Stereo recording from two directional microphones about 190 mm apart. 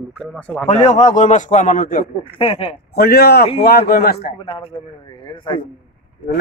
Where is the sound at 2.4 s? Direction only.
30° left (ahead or behind).